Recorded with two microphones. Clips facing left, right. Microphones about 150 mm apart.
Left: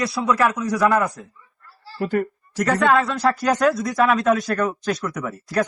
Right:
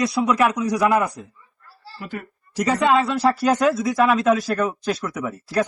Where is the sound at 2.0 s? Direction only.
40° left (ahead or behind).